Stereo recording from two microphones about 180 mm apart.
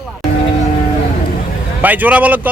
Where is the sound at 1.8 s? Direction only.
10° right (ahead or behind).